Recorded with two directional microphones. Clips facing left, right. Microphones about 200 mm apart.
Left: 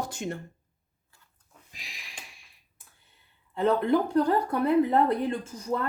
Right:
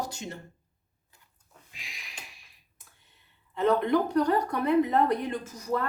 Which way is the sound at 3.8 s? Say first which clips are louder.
Left 1 dB; 30° left (ahead or behind).